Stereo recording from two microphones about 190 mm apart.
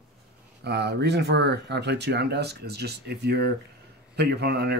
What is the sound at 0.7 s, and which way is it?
Speech, 60° right (ahead or behind).